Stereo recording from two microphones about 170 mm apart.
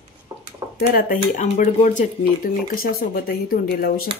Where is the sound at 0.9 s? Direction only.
55° left (ahead or behind).